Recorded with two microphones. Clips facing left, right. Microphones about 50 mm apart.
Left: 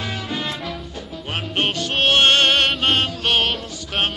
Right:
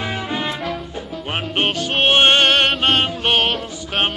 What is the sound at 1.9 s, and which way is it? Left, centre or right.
Music, centre.